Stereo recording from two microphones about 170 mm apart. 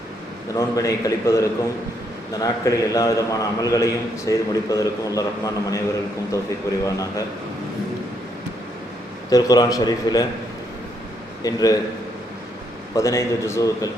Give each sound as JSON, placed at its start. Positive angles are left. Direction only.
{"t": 0.5, "sound": "a man's voice", "side_deg": 20}
{"t": 9.3, "sound": "a man's voice", "side_deg": 20}
{"t": 11.4, "sound": "a man's voice", "side_deg": 20}
{"t": 12.9, "sound": "a man's voice", "side_deg": 20}